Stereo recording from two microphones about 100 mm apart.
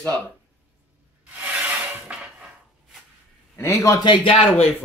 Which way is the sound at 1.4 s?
15° right (ahead or behind).